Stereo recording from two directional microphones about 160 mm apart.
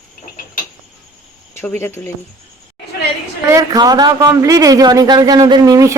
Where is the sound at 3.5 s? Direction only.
20° right (ahead or behind).